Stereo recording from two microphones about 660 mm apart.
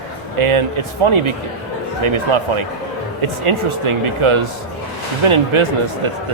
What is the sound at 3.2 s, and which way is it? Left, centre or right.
Speech, right.